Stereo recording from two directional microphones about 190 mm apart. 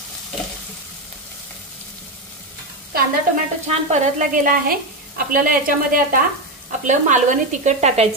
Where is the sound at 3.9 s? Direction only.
45° right (ahead or behind).